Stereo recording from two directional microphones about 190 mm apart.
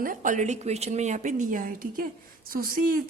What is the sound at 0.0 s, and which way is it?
A woman's voice, 45° right (ahead or behind).